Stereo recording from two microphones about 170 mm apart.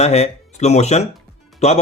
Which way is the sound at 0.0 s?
40° left (ahead or behind).